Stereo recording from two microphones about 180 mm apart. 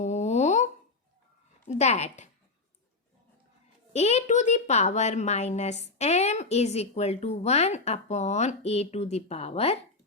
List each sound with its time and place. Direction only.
0.0 s a sound: 40° left (ahead or behind)
1.6 s a woman's voice: 40° left (ahead or behind)
3.9 s a woman's voice: 40° left (ahead or behind)